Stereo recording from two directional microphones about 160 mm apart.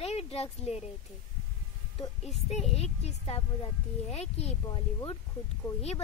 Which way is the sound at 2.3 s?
45° left (ahead or behind).